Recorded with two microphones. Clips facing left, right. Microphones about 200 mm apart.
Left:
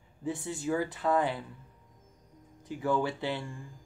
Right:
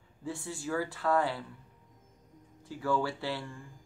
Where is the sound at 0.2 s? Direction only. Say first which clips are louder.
Left 4 dB; 20° left (ahead or behind).